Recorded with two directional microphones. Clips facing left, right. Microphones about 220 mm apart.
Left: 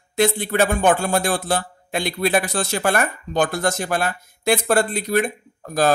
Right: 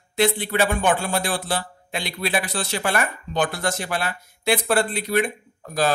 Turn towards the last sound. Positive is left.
turn(degrees=45)  # may be behind; listen again after turning